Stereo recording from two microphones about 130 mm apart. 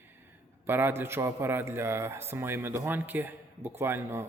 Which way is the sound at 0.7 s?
15° right (ahead or behind).